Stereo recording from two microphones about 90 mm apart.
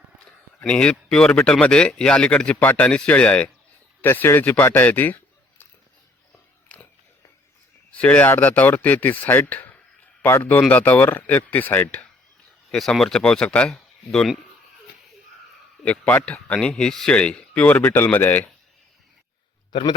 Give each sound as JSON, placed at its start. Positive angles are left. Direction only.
{"t": 0.6, "sound": "a man's voice", "side_deg": 10}
{"t": 4.0, "sound": "a man's voice", "side_deg": 25}
{"t": 7.9, "sound": "speech", "side_deg": 15}
{"t": 12.7, "sound": "speech", "side_deg": 5}
{"t": 15.8, "sound": "speech", "side_deg": 15}
{"t": 19.7, "sound": "a man's voice", "side_deg": 65}